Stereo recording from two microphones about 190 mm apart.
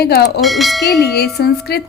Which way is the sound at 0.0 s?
55° left (ahead or behind).